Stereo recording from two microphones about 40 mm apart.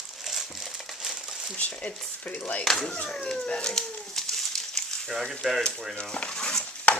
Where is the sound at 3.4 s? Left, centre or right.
Left.